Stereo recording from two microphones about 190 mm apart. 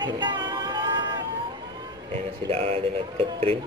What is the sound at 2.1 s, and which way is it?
Speech, 30° right (ahead or behind).